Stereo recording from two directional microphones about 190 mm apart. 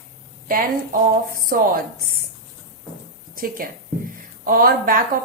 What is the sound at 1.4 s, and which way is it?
Speech, 50° right (ahead or behind).